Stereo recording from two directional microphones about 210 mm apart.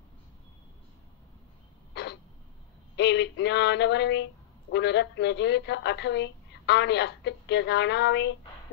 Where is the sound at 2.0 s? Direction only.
55° left (ahead or behind).